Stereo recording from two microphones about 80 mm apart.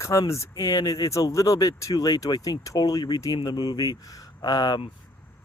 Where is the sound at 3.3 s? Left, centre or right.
Left.